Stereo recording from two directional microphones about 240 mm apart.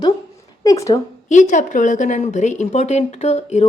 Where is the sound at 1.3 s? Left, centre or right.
Left.